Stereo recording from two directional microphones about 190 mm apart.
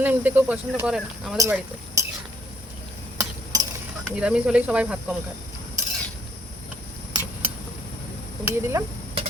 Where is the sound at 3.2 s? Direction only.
20° right (ahead or behind).